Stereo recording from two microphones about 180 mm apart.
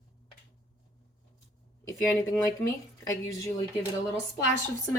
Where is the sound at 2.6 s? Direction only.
20° left (ahead or behind).